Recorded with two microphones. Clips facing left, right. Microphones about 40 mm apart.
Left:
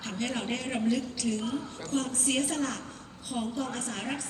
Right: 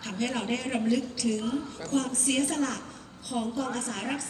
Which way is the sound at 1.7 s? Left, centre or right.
Left.